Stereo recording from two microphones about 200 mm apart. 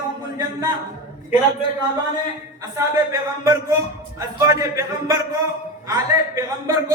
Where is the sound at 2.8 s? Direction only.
15° right (ahead or behind).